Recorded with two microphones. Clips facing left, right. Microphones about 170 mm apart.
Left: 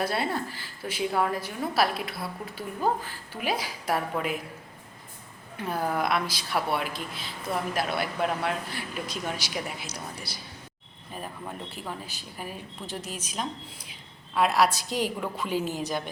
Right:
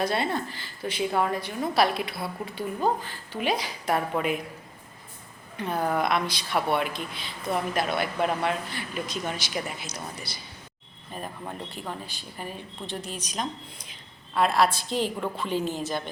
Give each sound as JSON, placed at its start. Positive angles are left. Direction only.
{"t": 0.0, "sound": "a woman's voice", "side_deg": 5}
{"t": 5.5, "sound": "a woman's voice", "side_deg": 5}
{"t": 11.1, "sound": "a woman's voice", "side_deg": 5}